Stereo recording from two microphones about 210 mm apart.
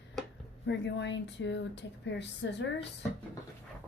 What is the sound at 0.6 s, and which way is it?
A woman's voice, 55° left (ahead or behind).